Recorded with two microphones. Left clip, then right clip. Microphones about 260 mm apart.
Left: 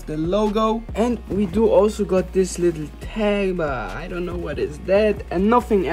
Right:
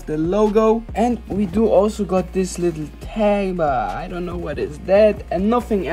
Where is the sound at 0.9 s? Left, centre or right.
Centre.